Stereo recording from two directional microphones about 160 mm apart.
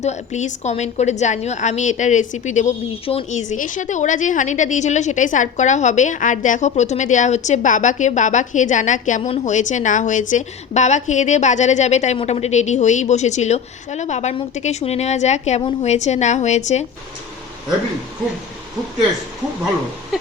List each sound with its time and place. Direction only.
0.0 s a woman's voice: 45° left (ahead or behind)